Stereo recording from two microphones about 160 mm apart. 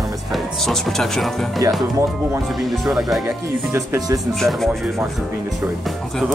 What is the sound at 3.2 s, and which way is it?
Speech, 20° right (ahead or behind).